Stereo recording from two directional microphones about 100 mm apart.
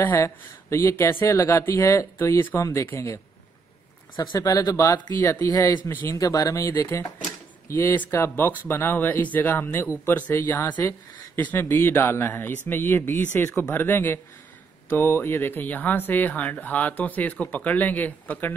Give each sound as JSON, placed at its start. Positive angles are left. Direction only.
{"t": 0.0, "sound": "speech", "side_deg": 25}
{"t": 4.2, "sound": "speech", "side_deg": 40}
{"t": 5.2, "sound": "speech", "side_deg": 25}
{"t": 6.1, "sound": "speech", "side_deg": 35}